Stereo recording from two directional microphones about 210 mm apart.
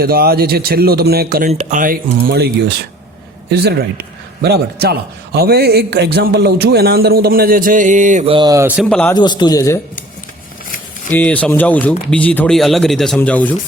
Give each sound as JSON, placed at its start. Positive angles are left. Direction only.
{"t": 0.0, "sound": "a man's voice", "side_deg": -45}
{"t": 1.5, "sound": "speech", "side_deg": -35}
{"t": 3.5, "sound": "a man's voice", "side_deg": -50}
{"t": 8.4, "sound": "speech", "side_deg": -15}
{"t": 8.9, "sound": "a man's voice", "side_deg": 5}
{"t": 9.1, "sound": "a man's voice", "side_deg": 20}
{"t": 11.2, "sound": "speech", "side_deg": 5}